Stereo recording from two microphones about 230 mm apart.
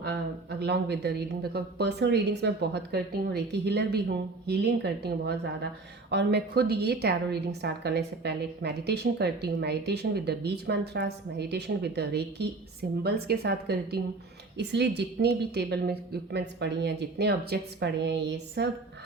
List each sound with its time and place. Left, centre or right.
0.6 s a woman's voice: right